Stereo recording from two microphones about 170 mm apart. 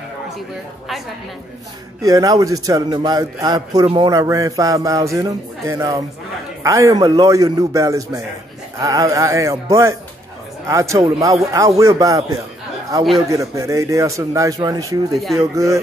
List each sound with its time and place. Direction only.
2.0 s a man's voice: 20° right (ahead or behind)
15.1 s speech: centre (ahead or behind)
15.5 s speech: 20° right (ahead or behind)